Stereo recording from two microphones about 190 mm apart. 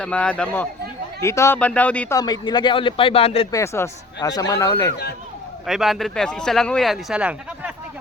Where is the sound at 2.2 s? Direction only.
20° left (ahead or behind).